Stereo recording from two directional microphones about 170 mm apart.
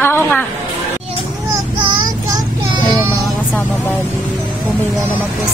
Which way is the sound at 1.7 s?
25° right (ahead or behind).